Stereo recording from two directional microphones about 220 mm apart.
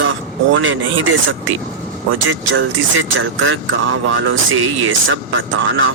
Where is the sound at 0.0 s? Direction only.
60° right (ahead or behind).